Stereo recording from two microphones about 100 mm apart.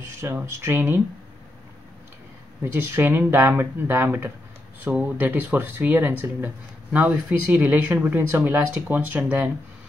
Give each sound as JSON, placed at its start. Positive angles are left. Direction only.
{"t": 0.0, "sound": "speech", "side_deg": -25}
{"t": 2.6, "sound": "speech", "side_deg": -25}